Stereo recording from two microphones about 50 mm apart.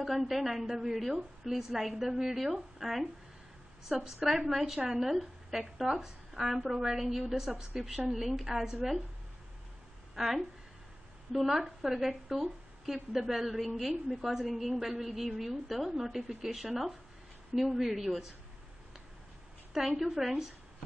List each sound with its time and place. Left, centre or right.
0.0 s a woman's voice: centre
4.7 s a woman's voice: centre
5.1 s a woman's voice: centre
10.1 s a woman's voice: centre
19.7 s a woman's voice: centre